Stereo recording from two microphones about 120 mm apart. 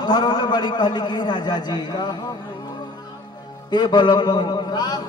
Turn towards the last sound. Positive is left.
turn(degrees=35)  # may be behind; listen again after turning